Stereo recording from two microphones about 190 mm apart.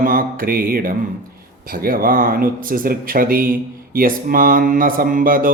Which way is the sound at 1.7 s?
50° right (ahead or behind).